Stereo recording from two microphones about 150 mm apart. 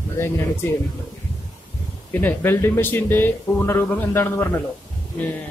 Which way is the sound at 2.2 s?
15° left (ahead or behind).